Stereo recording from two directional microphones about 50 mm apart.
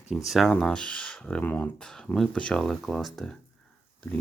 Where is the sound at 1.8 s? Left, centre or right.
Centre.